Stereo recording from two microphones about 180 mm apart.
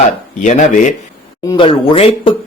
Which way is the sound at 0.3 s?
45° left (ahead or behind).